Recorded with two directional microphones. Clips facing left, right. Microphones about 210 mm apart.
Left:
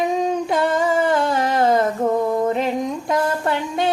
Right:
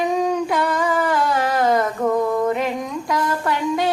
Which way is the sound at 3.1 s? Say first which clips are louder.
Left 1 dB; 25° left (ahead or behind).